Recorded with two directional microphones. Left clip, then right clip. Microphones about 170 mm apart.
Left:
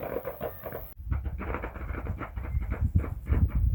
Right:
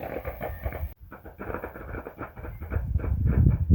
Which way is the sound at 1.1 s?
45° right (ahead or behind).